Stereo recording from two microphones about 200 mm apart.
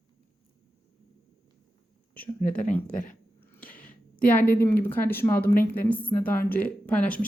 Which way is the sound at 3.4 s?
10° left (ahead or behind).